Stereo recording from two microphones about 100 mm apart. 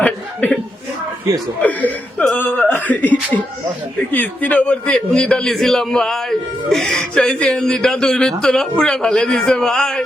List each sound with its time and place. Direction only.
1.6 s speech: 15° left (ahead or behind)